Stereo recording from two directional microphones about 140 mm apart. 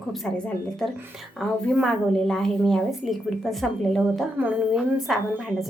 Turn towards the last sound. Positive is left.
turn(degrees=0)  # may be behind; listen again after turning